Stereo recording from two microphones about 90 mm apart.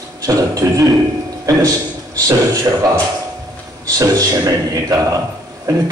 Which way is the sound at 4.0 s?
35° right (ahead or behind).